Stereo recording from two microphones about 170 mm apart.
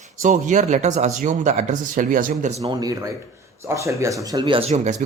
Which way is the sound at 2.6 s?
20° right (ahead or behind).